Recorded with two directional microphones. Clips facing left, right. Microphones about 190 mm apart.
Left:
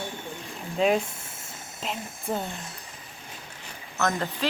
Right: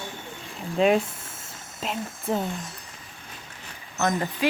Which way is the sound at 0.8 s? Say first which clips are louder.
Right 3 dB; centre (ahead or behind).